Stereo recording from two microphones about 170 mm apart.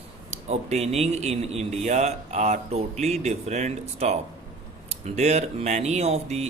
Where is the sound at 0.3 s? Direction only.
40° right (ahead or behind).